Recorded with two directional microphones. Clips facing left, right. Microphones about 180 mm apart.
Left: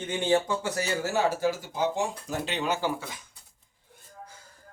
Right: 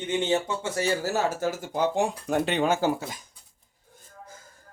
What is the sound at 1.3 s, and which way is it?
Speech, 45° right (ahead or behind).